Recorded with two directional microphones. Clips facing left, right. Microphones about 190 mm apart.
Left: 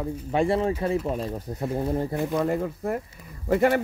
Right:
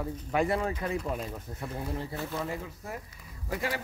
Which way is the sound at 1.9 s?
45° left (ahead or behind).